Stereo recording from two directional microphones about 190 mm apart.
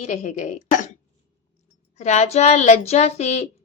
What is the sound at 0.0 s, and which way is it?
Speech, 40° left (ahead or behind).